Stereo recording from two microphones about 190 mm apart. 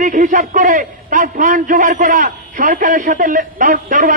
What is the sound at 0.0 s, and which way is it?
A man's voice, 45° right (ahead or behind).